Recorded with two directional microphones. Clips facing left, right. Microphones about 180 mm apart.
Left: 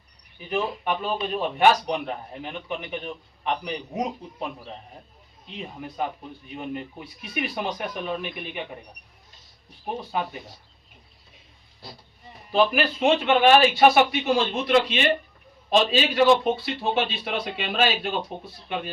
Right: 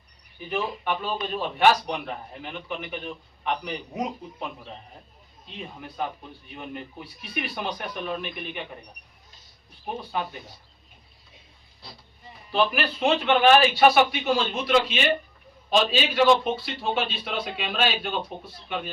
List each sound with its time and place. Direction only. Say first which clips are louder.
0.6 s a man's voice: left 1 dB; centre (ahead or behind)
1.9 s a man's voice: left 3 dB; 10° left (ahead or behind)
4.4 s a man's voice: left 3 dB; centre (ahead or behind)
5.8 s a man's voice: left 2 dB; 5° left (ahead or behind)
9.8 s a man's voice: left 2 dB; centre (ahead or behind)
12.5 s a man's voice: left 3 dB; centre (ahead or behind)